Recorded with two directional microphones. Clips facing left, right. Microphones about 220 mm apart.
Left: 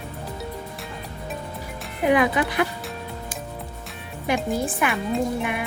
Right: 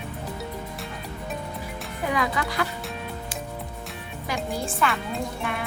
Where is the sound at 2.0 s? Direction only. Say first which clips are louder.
Left 7 dB; 20° left (ahead or behind).